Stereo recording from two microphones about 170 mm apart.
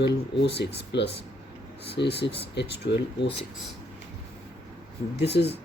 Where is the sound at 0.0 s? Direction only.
80° left.